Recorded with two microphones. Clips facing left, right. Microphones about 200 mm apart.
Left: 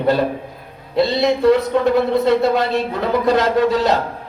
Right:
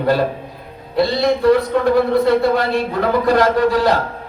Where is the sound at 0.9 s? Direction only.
20° left (ahead or behind).